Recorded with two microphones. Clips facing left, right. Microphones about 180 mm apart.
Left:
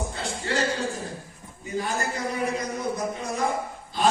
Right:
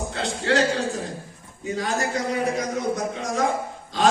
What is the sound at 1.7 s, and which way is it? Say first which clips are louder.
A man's voice: right 3 dB; 90° right.